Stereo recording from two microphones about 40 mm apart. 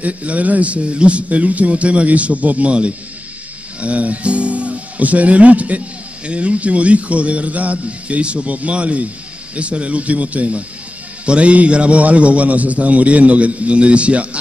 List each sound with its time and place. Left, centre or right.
0.0 s a man's voice: right